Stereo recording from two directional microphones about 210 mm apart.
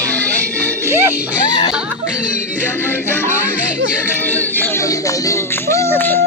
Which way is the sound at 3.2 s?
10° right (ahead or behind).